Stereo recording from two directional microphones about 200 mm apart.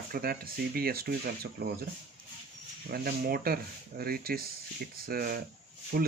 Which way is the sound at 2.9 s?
50° right (ahead or behind).